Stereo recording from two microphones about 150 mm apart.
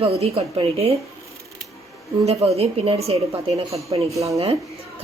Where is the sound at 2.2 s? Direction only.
45° right (ahead or behind).